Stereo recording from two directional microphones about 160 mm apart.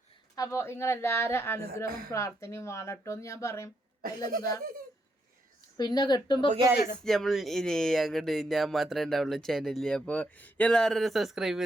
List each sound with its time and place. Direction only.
0.3 s a woman's voice: 20° left (ahead or behind)
4.0 s speech: 65° right (ahead or behind)
5.7 s speech: 25° left (ahead or behind)
7.0 s speech: centre (ahead or behind)